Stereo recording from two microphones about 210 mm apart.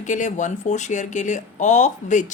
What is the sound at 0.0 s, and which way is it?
Speech, 35° left (ahead or behind).